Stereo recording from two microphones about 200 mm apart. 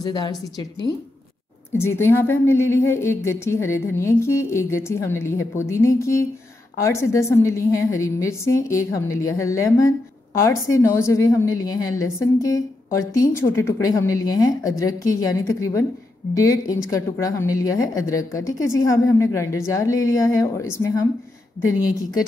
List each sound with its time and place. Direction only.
0.0 s a woman's voice: 20° left (ahead or behind)